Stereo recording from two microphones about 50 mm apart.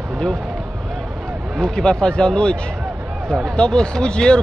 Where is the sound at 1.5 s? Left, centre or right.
Centre.